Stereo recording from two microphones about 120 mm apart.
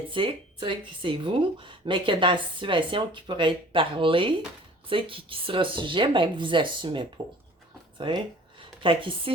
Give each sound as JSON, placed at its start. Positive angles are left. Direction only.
{"t": 0.1, "sound": "speech", "side_deg": -45}